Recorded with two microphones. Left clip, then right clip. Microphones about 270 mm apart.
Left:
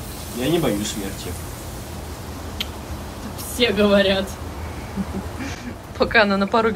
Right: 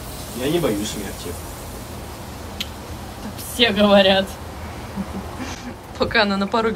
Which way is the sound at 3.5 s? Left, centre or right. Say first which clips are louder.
Right 2 dB; right.